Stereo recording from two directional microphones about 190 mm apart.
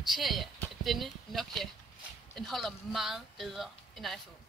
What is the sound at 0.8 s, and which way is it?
Speech, centre (ahead or behind).